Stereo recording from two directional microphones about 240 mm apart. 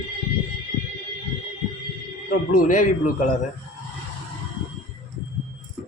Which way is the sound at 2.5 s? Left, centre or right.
Left.